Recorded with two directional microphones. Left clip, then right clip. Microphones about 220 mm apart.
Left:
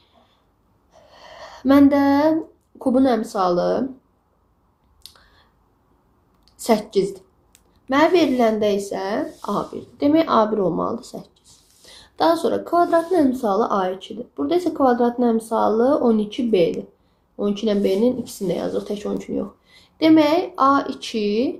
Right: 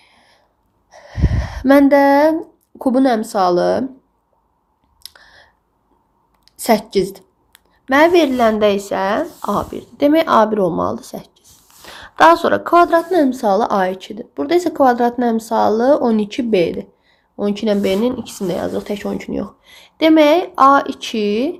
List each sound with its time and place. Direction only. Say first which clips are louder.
0.0 s a sound: right 6 dB; 35° right (ahead or behind)
2.7 s speech: right 3 dB; 35° right (ahead or behind)
5.0 s clicking: right 7 dB; 35° right (ahead or behind)
6.4 s a woman's voice: right 4 dB; 35° right (ahead or behind)
11.9 s a sound: right 14 dB; 30° right (ahead or behind)
12.3 s speech: right 7 dB; 30° right (ahead or behind)